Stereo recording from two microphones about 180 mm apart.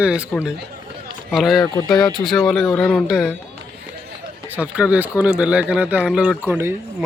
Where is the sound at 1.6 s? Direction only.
20° left (ahead or behind).